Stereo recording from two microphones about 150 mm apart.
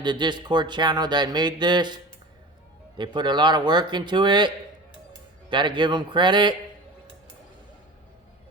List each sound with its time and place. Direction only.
0.0 s speech: 30° right (ahead or behind)
3.0 s speech: 30° right (ahead or behind)